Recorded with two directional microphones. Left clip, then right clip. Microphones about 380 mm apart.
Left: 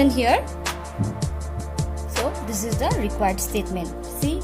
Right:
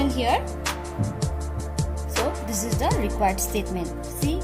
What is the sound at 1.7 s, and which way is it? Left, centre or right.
Speech, centre.